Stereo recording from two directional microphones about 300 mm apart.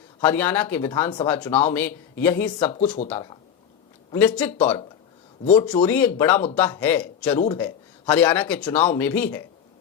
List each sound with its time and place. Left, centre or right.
0.2 s speech: centre
3.0 s speech: left
4.1 s speech: centre
5.7 s speech: centre
8.7 s speech: left
9.0 s speech: centre